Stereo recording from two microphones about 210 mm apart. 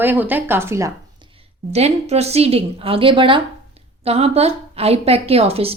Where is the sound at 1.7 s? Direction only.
30° right (ahead or behind).